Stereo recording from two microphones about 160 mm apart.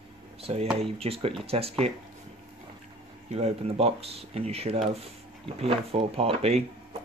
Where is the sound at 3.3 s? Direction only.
45° right (ahead or behind).